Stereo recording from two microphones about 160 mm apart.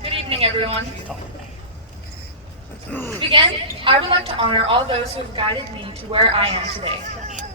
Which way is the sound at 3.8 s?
35° right (ahead or behind).